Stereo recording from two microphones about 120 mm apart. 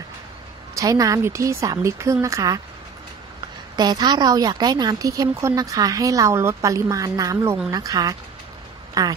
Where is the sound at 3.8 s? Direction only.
35° right (ahead or behind).